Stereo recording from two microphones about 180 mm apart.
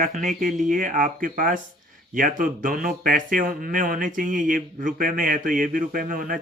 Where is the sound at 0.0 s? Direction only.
40° right (ahead or behind).